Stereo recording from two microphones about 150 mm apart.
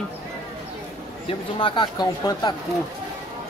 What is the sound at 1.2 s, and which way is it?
Speech, 35° left (ahead or behind).